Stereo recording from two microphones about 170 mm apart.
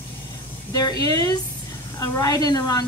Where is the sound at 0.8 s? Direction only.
20° left (ahead or behind).